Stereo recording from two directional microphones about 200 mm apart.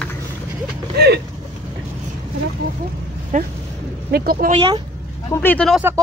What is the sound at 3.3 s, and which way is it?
Speech, 40° right (ahead or behind).